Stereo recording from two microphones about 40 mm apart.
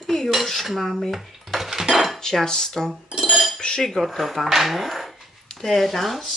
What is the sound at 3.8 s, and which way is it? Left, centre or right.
Speech, centre.